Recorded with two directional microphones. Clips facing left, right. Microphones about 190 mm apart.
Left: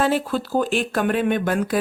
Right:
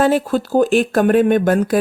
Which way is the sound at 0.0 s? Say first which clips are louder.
Right 5 dB; 45° right (ahead or behind).